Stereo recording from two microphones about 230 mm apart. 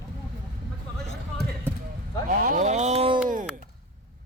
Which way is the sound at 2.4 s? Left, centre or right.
Right.